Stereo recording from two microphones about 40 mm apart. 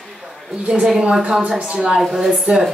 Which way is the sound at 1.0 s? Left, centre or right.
Right.